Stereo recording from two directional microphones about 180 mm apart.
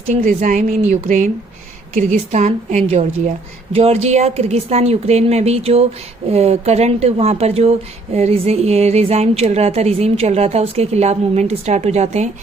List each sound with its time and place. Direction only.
0.1 s speech: 45° right (ahead or behind)